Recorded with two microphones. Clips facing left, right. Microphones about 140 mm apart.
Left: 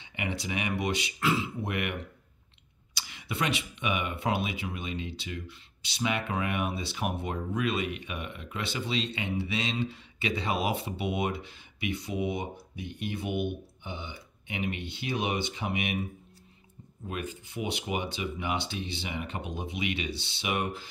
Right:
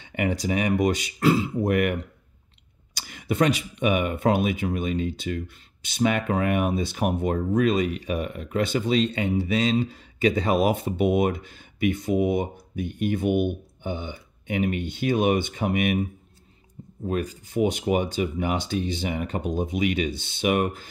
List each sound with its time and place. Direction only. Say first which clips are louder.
0.0 s speech: right 9 dB; 45° right (ahead or behind)
17.1 s speech: right 9 dB; 40° right (ahead or behind)